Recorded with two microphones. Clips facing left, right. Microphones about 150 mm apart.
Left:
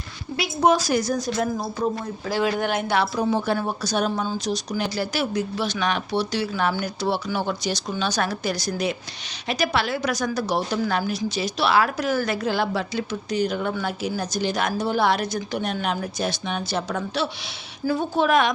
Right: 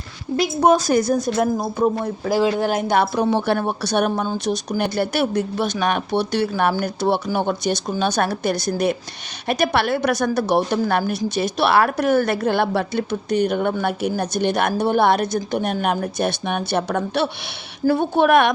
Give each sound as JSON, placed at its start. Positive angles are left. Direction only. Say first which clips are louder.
{"t": 0.6, "sound": "speech", "louder": "right 3 dB", "side_deg": -50}
{"t": 2.4, "sound": "speech", "louder": "right 3 dB", "side_deg": -30}
{"t": 3.2, "sound": "a woman's voice", "louder": "right 4 dB", "side_deg": -65}